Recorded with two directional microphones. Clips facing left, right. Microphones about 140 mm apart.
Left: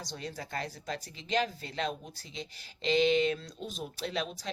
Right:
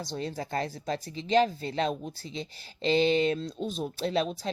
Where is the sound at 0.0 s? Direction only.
30° right (ahead or behind).